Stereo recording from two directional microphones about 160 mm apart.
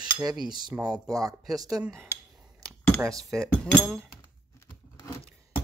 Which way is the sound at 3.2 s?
Centre (ahead or behind).